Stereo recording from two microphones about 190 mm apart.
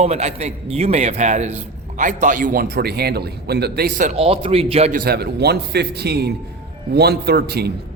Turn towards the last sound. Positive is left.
turn(degrees=-55)  # may be behind; listen again after turning